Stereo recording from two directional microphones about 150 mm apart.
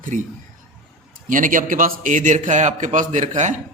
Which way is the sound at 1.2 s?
60° right (ahead or behind).